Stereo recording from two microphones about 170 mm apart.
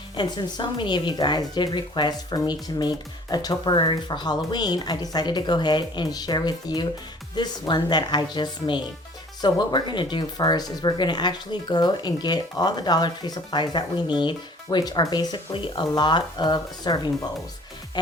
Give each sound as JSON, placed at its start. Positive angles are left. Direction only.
{"t": 0.2, "sound": "speech", "side_deg": 25}
{"t": 18.0, "sound": "music", "side_deg": 25}